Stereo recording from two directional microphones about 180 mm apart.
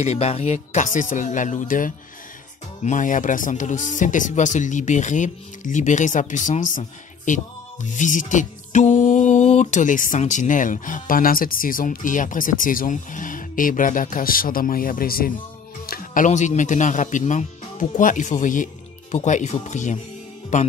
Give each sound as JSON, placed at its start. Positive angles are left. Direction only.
{"t": 0.0, "sound": "music", "side_deg": 35}
{"t": 19.1, "sound": "speech", "side_deg": 40}